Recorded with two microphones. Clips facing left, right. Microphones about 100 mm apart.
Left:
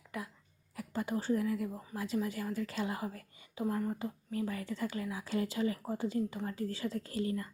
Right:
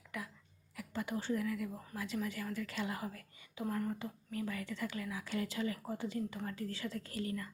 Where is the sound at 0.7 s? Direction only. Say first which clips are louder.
Left 4 dB; 35° left (ahead or behind).